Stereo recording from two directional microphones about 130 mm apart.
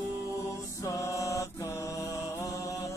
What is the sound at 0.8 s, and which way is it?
Mantra, 25° left (ahead or behind).